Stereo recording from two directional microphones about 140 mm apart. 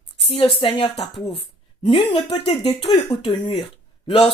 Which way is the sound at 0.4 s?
40° left (ahead or behind).